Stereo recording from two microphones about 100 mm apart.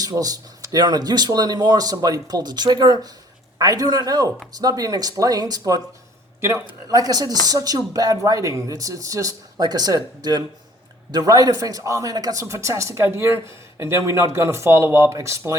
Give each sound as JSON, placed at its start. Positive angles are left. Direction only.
{"t": 0.0, "sound": "speech", "side_deg": -40}
{"t": 6.8, "sound": "speech", "side_deg": -40}